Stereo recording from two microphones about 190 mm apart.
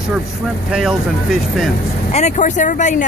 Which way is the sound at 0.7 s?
5° right (ahead or behind).